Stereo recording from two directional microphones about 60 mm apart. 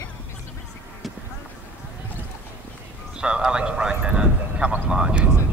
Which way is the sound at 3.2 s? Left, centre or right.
Centre.